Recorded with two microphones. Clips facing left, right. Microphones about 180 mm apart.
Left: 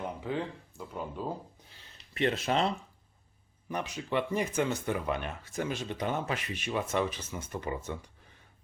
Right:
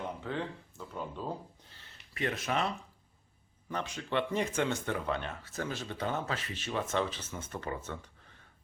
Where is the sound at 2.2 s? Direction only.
25° left (ahead or behind).